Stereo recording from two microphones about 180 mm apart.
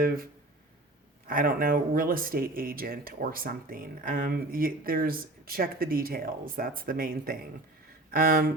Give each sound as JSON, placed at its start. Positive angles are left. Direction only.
{"t": 1.3, "sound": "speech", "side_deg": -50}